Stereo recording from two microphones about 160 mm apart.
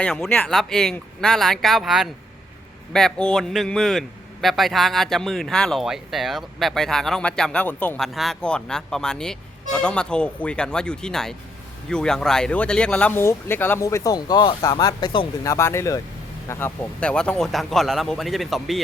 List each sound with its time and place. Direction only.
0.0 s a man's voice: 5° left (ahead or behind); by 15.3 s 30° left (ahead or behind)
15.4 s a man's voice: 15° left (ahead or behind); by 18.8 s centre (ahead or behind)